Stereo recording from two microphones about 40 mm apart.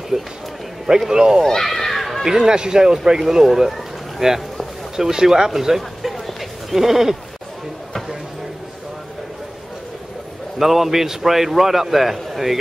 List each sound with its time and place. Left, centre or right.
0.1 s a man's voice: centre
1.4 s a sound: centre
2.2 s a man's voice: centre
10.6 s a man's voice: centre